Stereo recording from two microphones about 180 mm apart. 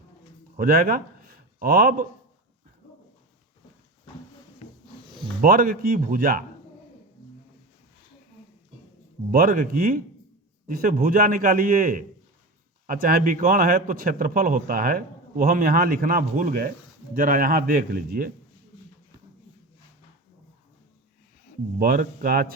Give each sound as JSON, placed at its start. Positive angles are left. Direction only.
{"t": 0.5, "sound": "speech", "side_deg": -50}
{"t": 5.4, "sound": "speech", "side_deg": -55}
{"t": 9.3, "sound": "a man's voice", "side_deg": -50}
{"t": 21.8, "sound": "a man's voice", "side_deg": -50}